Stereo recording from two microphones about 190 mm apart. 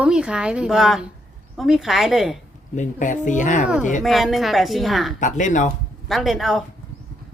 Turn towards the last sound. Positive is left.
turn(degrees=0)  # may be behind; listen again after turning